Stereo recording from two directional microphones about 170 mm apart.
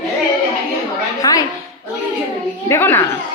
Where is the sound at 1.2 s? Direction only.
20° left (ahead or behind).